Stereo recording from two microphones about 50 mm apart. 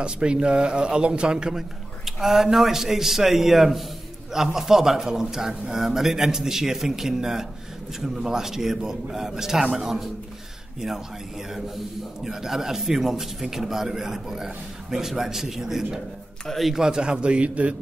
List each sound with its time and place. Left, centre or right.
0.0 s a man's voice: centre
2.0 s a man's voice: centre
12.3 s a man's voice: centre
16.4 s a man's voice: centre
16.7 s a man's voice: centre